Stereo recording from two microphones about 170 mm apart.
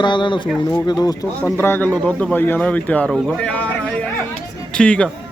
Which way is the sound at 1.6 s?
10° left (ahead or behind).